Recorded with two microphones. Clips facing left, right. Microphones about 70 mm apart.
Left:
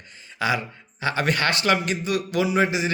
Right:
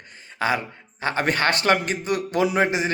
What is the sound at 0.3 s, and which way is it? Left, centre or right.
Speech, right.